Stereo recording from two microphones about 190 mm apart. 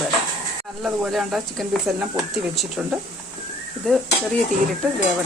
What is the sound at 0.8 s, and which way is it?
Speech, centre (ahead or behind).